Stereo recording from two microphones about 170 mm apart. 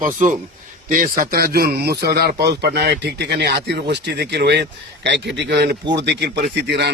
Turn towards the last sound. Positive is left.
turn(degrees=-85)